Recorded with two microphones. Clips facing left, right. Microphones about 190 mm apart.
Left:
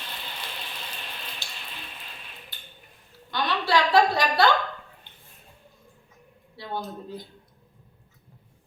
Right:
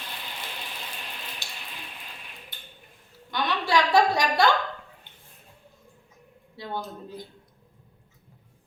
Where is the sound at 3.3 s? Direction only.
15° right (ahead or behind).